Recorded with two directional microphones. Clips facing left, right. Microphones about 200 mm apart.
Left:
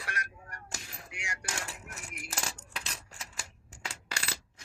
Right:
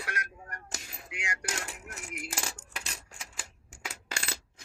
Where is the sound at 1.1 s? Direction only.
65° right (ahead or behind).